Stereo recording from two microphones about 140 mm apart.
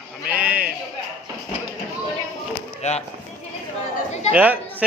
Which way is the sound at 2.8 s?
50° left (ahead or behind).